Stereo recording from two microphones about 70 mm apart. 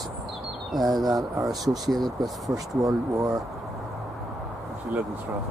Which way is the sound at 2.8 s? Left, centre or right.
Right.